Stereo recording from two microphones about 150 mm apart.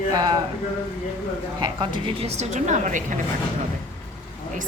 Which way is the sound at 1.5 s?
30° right (ahead or behind).